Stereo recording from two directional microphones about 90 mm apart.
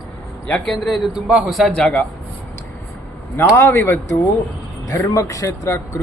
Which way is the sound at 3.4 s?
25° left (ahead or behind).